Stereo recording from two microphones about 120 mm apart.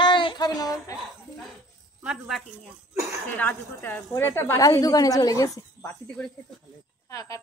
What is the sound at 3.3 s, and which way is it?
A woman's voice, 15° left (ahead or behind).